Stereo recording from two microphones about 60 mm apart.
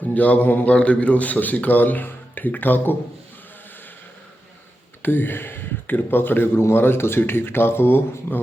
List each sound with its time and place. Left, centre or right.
0.1 s a man's voice: left
5.0 s a man's voice: left